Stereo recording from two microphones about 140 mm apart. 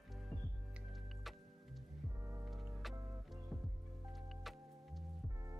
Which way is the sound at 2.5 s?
Centre (ahead or behind).